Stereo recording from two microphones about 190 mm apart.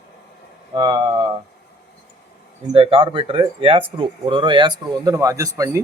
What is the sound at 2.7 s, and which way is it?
Speech, 30° right (ahead or behind).